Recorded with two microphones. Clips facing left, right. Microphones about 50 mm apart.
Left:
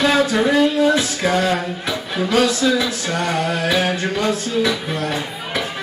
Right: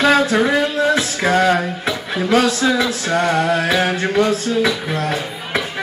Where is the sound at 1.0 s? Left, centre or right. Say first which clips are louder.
Right 2 dB; right.